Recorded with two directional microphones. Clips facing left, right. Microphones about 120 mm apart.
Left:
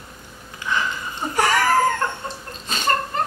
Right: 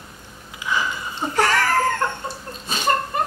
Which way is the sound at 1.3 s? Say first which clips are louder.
Left 1 dB; 15° left (ahead or behind).